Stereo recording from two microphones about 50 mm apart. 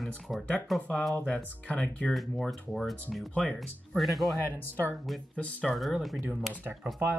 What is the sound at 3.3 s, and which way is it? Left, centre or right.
Speech, left.